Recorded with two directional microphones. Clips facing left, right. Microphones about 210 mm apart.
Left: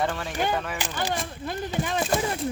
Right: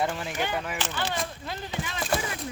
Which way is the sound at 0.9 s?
50° left (ahead or behind).